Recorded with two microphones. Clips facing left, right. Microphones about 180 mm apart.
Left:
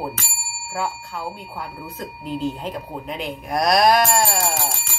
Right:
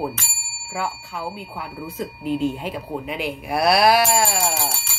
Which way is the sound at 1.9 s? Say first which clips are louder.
Right 5 dB; 5° right (ahead or behind).